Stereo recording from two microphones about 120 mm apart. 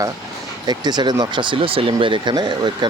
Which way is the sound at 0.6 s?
35° right (ahead or behind).